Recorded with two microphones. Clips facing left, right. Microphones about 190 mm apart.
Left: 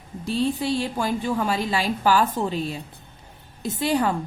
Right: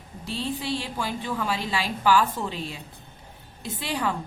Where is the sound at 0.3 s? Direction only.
45° left (ahead or behind).